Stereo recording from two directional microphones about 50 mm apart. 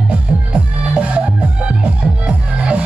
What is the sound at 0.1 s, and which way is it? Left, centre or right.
Music, right.